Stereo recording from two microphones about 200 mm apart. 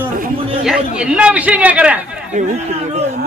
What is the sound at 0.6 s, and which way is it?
A man's voice, 5° right (ahead or behind).